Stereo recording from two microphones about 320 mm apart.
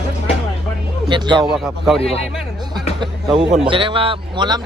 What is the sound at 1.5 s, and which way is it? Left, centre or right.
Speech, centre.